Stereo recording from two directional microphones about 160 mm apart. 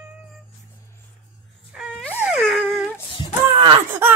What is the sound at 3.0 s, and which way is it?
Child singing, 30° left (ahead or behind).